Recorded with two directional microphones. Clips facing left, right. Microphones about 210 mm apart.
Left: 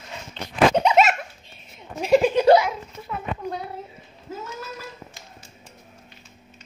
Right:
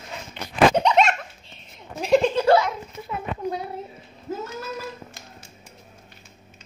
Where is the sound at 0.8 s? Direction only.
5° left (ahead or behind).